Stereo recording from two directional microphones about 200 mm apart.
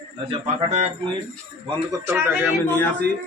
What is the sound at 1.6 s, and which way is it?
Speech, 10° right (ahead or behind).